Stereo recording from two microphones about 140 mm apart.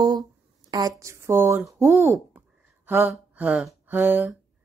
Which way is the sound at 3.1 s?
5° right (ahead or behind).